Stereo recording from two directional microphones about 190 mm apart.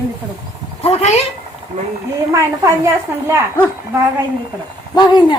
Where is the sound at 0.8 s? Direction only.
30° left (ahead or behind).